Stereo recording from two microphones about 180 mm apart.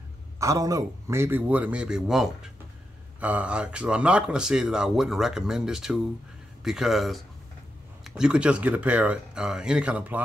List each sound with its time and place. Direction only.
0.4 s speech: 20° right (ahead or behind)